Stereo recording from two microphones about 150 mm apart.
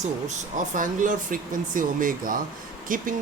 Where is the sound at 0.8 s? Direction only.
60° right (ahead or behind).